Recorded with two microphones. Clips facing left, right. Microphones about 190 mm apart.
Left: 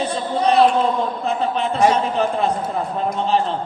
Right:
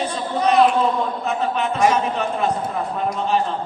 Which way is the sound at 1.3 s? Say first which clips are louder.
Left 1 dB; 30° left (ahead or behind).